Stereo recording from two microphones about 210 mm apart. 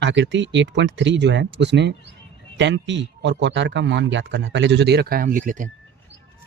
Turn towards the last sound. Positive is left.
turn(degrees=-40)  # may be behind; listen again after turning